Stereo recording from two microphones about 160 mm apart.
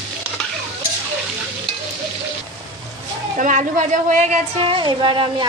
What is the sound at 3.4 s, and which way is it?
A woman's voice, 50° right (ahead or behind).